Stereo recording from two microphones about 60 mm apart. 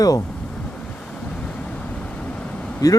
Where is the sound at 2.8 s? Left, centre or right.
Left.